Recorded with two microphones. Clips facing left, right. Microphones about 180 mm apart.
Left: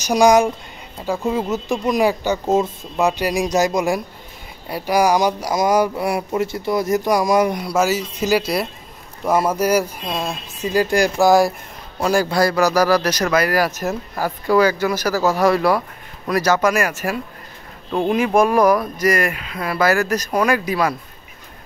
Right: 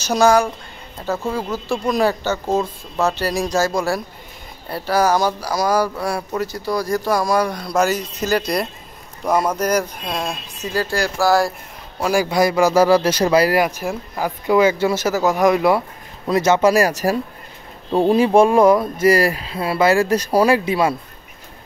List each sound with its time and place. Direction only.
0.0 s speech: 15° left (ahead or behind)
7.7 s speech: 5° left (ahead or behind)
10.7 s speech: 15° left (ahead or behind)
12.0 s speech: 10° right (ahead or behind); by 13.7 s 30° right (ahead or behind)
13.7 s speech: 10° right (ahead or behind)